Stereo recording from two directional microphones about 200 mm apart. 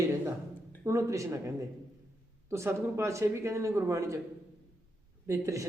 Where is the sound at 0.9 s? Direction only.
15° right (ahead or behind).